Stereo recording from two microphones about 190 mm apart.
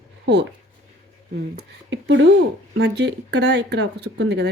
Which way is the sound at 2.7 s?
65° right (ahead or behind).